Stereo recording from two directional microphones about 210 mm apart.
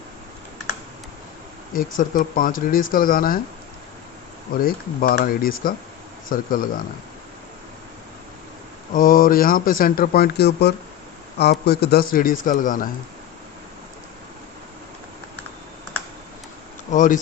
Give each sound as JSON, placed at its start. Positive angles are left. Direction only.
{"t": 1.7, "sound": "speech", "side_deg": 40}
{"t": 4.5, "sound": "speech", "side_deg": 40}
{"t": 8.9, "sound": "speech", "side_deg": 40}
{"t": 16.9, "sound": "speech", "side_deg": 40}